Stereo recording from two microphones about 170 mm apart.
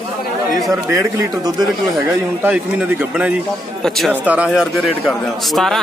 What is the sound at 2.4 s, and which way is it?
Speech, 10° right (ahead or behind).